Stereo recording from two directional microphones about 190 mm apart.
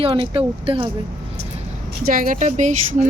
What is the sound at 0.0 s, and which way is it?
Speech, 30° right (ahead or behind).